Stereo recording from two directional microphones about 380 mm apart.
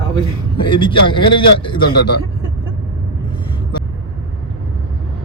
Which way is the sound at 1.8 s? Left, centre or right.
Left.